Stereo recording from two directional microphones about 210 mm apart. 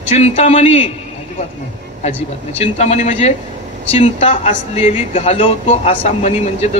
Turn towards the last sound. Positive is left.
turn(degrees=30)  # may be behind; listen again after turning